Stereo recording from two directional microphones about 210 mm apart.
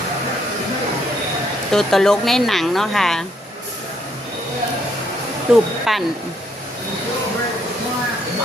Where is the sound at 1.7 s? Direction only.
Centre (ahead or behind).